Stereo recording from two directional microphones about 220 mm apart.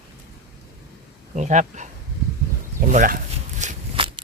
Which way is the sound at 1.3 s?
35° right (ahead or behind).